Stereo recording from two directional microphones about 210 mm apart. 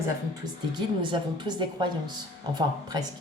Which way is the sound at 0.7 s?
20° right (ahead or behind).